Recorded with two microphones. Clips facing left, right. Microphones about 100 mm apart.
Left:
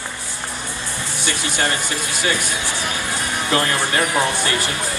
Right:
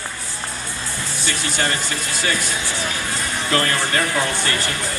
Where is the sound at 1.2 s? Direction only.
20° left (ahead or behind).